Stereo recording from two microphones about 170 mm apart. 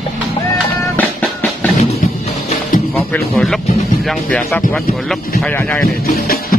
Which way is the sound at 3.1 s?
Centre (ahead or behind).